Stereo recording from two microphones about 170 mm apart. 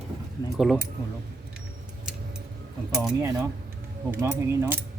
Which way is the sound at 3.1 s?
15° right (ahead or behind).